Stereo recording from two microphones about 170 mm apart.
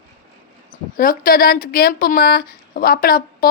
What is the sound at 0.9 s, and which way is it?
Speech, 55° left (ahead or behind).